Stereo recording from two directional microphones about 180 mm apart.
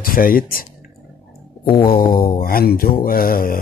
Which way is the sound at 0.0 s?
55° left (ahead or behind).